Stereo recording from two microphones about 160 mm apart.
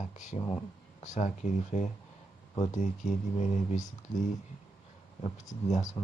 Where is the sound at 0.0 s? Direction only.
50° left (ahead or behind).